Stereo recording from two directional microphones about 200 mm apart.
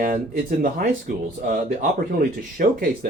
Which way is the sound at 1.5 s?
40° right (ahead or behind).